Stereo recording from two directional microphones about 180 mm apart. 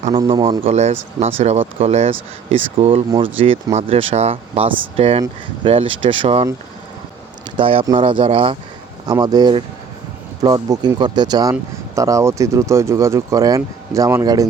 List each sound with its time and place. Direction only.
0.3 s speech: 25° right (ahead or behind)
7.5 s speech: 30° right (ahead or behind)